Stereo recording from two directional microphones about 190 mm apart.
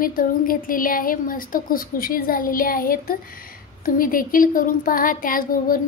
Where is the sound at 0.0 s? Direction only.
50° left (ahead or behind).